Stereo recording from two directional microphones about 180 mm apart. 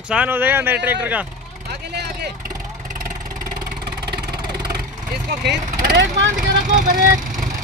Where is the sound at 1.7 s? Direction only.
65° right (ahead or behind).